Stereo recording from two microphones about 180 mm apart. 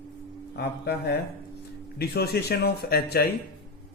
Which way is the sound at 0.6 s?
65° left (ahead or behind).